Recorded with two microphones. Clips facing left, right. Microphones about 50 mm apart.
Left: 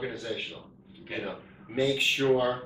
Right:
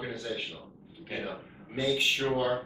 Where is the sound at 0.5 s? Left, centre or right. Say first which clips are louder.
Even; left.